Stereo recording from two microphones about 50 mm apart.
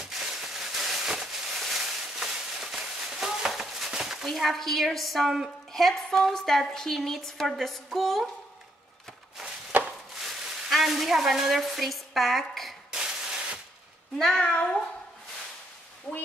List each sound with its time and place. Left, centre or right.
0.0 s a sound: centre
4.3 s a woman's voice: centre
5.7 s a woman's voice: centre
9.7 s a sound: right
10.2 s sizzle: centre
12.9 s spray: centre
14.1 s a woman's voice: centre
14.4 s speech: left